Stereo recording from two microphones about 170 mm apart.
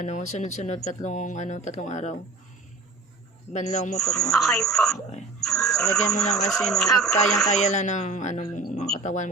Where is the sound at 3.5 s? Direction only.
40° left (ahead or behind).